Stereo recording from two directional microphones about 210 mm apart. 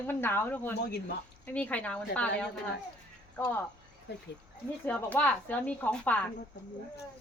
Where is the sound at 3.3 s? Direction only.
10° left (ahead or behind).